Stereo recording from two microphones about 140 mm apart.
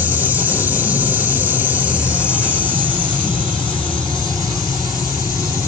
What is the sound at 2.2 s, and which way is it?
Train, 10° right (ahead or behind).